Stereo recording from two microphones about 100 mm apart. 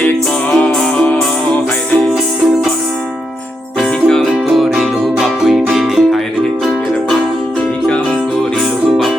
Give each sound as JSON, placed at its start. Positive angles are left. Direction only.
{"t": 0.6, "sound": "music", "side_deg": 10}
{"t": 3.8, "sound": "music", "side_deg": 5}